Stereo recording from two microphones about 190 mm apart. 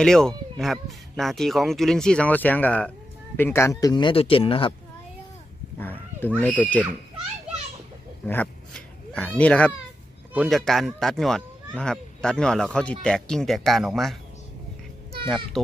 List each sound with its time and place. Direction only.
0.0 s speech: 5° left (ahead or behind); by 4.7 s 30° left (ahead or behind)
5.8 s speech: 10° left (ahead or behind)
8.3 s a sound: 5° left (ahead or behind)
9.4 s a child's voice: 5° left (ahead or behind)
15.2 s speech: centre (ahead or behind)